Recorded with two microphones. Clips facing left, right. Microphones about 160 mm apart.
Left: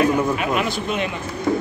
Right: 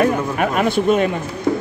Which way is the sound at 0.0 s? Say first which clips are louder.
Right 1 dB; 50° right (ahead or behind).